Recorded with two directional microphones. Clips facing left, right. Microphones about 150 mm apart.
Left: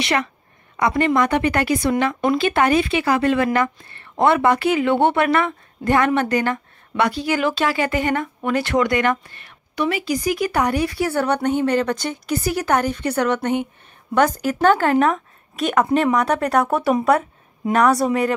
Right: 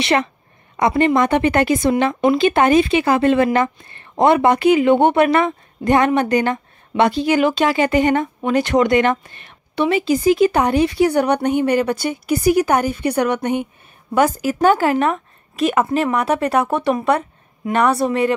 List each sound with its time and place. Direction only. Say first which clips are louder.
0.0 s speech: right 4 dB; 25° right (ahead or behind); by 18.3 s centre (ahead or behind)